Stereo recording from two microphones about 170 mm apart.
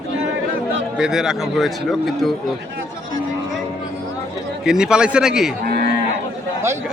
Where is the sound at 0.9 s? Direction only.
5° right (ahead or behind).